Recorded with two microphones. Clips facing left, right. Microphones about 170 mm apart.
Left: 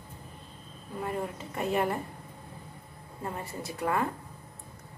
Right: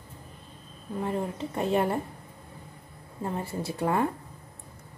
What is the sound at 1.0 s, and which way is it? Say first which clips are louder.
Speech: right 3 dB; 30° right (ahead or behind).